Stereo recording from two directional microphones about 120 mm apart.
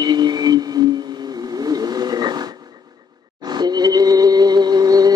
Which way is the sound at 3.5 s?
35° right (ahead or behind).